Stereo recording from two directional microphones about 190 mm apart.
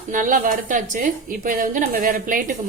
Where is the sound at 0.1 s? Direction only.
45° right (ahead or behind).